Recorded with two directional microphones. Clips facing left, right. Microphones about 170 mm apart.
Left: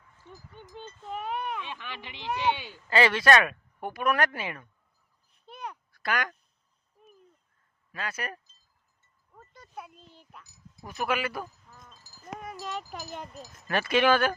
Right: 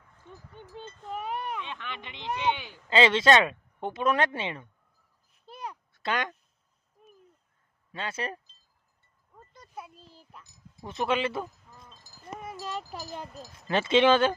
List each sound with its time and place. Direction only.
0.8 s speech: centre (ahead or behind)
1.7 s speech: 15° left (ahead or behind)
2.0 s speech: 20° right (ahead or behind)
2.3 s speech: 15° left (ahead or behind)
2.6 s speech: 20° right (ahead or behind)
5.5 s a sound: 5° right (ahead or behind)
5.9 s speech: 25° right (ahead or behind)
7.9 s speech: 25° right (ahead or behind)
9.5 s a sound: centre (ahead or behind)
9.9 s a child's voice: 35° right (ahead or behind)
12.9 s speech: centre (ahead or behind)
13.7 s speech: 25° right (ahead or behind)